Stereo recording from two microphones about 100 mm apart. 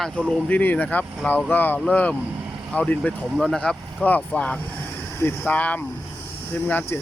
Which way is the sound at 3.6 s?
15° left (ahead or behind).